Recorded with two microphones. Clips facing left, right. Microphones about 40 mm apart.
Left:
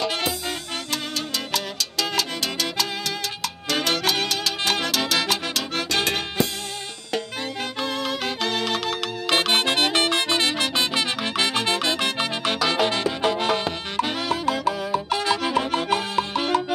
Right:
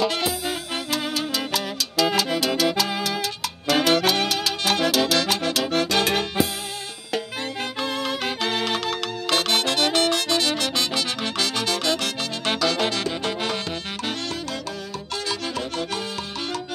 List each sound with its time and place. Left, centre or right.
1.1 s music: centre
7.8 s music: centre
9.3 s music: left